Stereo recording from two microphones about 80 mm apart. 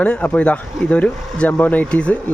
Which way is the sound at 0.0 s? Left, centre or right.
Centre.